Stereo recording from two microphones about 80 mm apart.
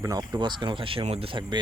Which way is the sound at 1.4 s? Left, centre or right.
Right.